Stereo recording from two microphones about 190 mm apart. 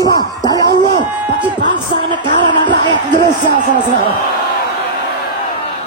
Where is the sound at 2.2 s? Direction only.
25° left (ahead or behind).